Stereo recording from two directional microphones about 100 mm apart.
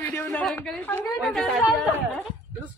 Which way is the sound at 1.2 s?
5° left (ahead or behind).